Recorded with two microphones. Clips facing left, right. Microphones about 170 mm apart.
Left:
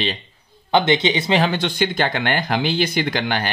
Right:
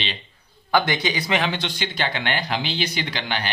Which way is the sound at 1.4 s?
50° left (ahead or behind).